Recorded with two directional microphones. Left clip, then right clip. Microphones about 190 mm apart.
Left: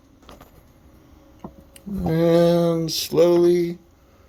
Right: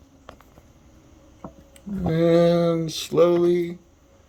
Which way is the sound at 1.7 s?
25° left (ahead or behind).